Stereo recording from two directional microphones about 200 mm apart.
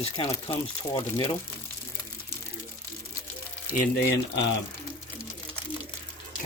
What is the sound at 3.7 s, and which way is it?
Speech, 55° left (ahead or behind).